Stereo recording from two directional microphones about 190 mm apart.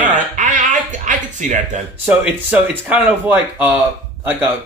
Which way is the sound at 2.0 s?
10° right (ahead or behind).